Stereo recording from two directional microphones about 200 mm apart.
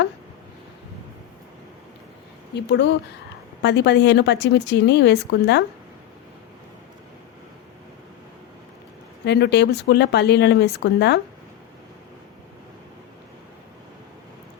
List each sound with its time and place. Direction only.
2.6 s speech: 60° left (ahead or behind)
9.2 s speech: 60° left (ahead or behind)